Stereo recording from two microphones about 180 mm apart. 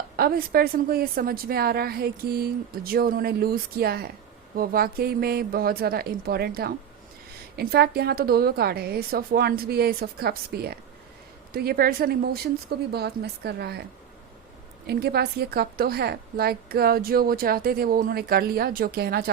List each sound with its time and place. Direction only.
0.2 s a woman's voice: 55° right (ahead or behind)
14.8 s a woman's voice: 60° right (ahead or behind)